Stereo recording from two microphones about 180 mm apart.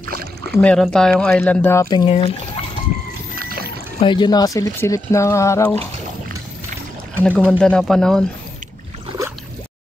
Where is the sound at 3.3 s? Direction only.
55° right (ahead or behind).